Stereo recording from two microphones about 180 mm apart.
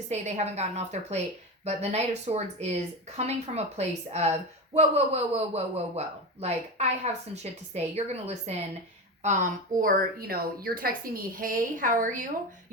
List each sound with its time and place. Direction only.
0.1 s a woman's voice: 40° right (ahead or behind)
9.2 s a woman's voice: 45° right (ahead or behind)